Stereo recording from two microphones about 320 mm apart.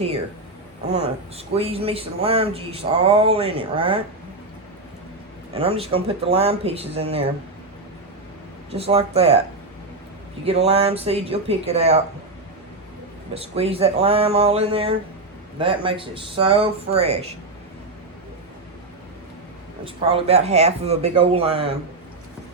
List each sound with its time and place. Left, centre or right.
0.9 s speech: centre
5.5 s speech: centre
8.7 s speech: centre
10.4 s speech: centre
13.3 s speech: centre
19.8 s speech: centre